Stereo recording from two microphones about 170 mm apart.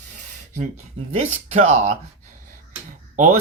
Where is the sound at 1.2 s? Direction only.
45° right (ahead or behind).